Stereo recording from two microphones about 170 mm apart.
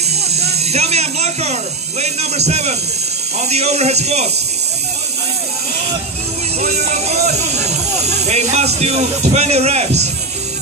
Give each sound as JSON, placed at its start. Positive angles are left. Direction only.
{"t": 0.3, "sound": "speech", "side_deg": -40}
{"t": 6.6, "sound": "music", "side_deg": -45}